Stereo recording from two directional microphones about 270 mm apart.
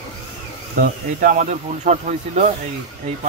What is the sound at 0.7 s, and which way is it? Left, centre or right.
Speech, right.